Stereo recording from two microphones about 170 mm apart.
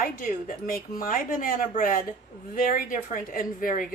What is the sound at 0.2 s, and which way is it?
A woman's voice, 55° left (ahead or behind).